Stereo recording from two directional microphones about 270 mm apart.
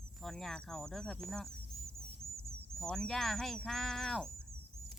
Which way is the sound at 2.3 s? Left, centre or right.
Right.